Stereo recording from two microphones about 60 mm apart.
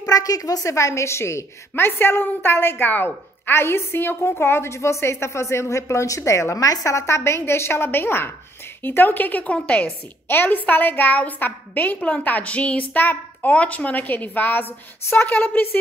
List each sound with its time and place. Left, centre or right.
0.0 s a woman's voice: left
10.2 s a woman's voice: left